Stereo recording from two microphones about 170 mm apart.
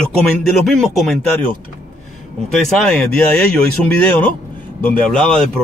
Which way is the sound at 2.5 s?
5° left (ahead or behind).